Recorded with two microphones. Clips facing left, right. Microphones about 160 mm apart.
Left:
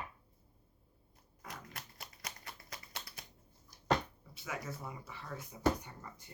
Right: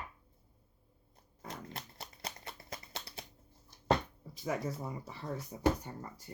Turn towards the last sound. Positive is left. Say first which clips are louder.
# right 5 dB
turn(degrees=-35)  # may be behind; listen again after turning